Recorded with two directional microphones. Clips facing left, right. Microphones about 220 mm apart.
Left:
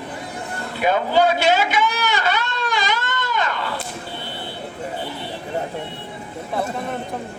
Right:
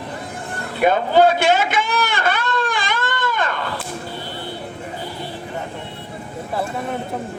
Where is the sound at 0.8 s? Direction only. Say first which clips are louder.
Right 3 dB; 55° right (ahead or behind).